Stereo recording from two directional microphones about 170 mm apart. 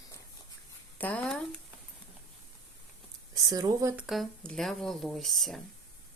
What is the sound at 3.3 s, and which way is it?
Speech, 20° right (ahead or behind).